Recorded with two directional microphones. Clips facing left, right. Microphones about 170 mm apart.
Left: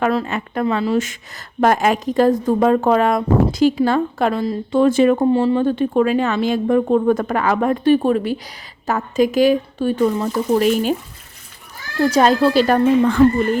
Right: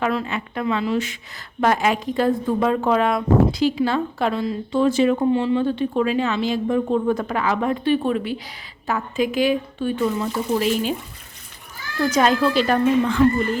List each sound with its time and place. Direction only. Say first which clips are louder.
0.0 s a woman's voice: left 4 dB; 40° left (ahead or behind)
4.8 s a woman's voice: left 4 dB; 50° left (ahead or behind)
5.1 s a woman's voice: left 3 dB; 40° left (ahead or behind)
11.9 s speech: left 4 dB; 30° left (ahead or behind)